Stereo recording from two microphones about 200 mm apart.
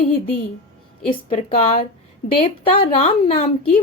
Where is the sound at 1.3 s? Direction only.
30° left (ahead or behind).